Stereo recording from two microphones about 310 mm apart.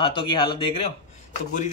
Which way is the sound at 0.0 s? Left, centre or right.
Centre.